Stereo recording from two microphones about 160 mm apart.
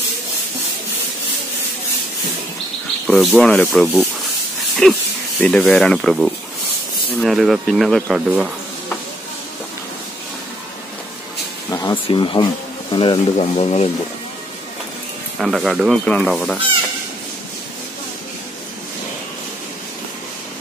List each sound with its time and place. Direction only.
3.1 s speech: 5° left (ahead or behind)
11.7 s speech: 25° left (ahead or behind)
15.3 s speech: centre (ahead or behind)